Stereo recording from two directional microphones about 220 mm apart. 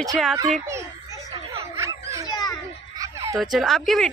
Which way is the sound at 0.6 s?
15° right (ahead or behind).